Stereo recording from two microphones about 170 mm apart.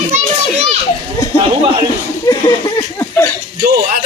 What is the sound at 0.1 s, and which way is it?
Children playing, 40° right (ahead or behind).